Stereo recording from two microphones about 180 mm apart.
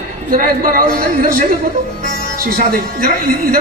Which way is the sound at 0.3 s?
50° right (ahead or behind).